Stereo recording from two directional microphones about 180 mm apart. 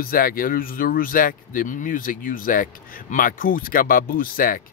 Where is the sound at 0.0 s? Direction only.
55° left (ahead or behind).